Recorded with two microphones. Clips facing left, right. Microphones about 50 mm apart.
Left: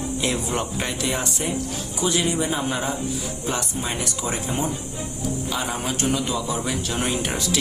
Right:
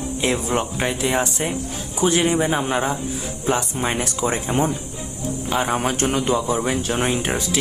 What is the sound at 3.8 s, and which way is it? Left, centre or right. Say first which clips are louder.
Speech: right 5 dB; right.